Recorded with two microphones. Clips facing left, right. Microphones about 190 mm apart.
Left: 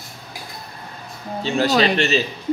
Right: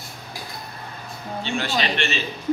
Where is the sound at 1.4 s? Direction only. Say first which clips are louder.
Left 8 dB; 40° left (ahead or behind).